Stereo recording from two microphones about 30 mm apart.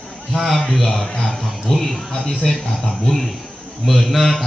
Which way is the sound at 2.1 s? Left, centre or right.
Left.